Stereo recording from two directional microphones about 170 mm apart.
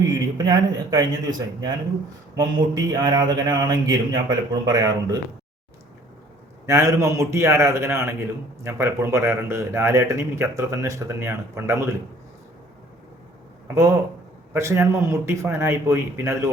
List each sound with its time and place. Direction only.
0.3 s speech: 25° right (ahead or behind)
6.7 s a man's voice: 15° right (ahead or behind)
13.7 s a man's voice: 15° right (ahead or behind)